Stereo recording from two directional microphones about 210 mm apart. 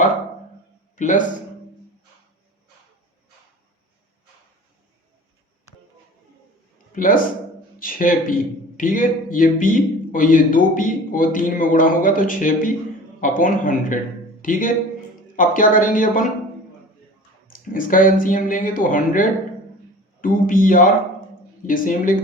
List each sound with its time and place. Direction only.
0.9 s a man's voice: 35° left (ahead or behind)
6.9 s a man's voice: 40° left (ahead or behind)
17.5 s a man's voice: 40° left (ahead or behind)